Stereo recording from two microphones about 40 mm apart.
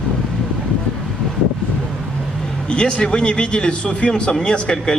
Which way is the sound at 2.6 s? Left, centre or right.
Left.